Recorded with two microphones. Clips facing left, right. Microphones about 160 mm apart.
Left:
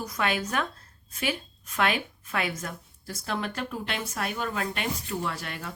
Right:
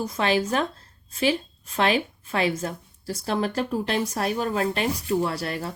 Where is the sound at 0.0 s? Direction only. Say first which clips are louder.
Right 6 dB; 30° right (ahead or behind).